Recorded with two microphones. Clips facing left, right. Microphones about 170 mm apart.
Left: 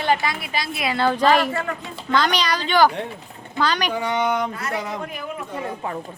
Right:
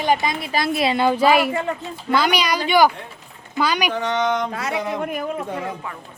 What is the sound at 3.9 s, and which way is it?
Speech, 10° left (ahead or behind).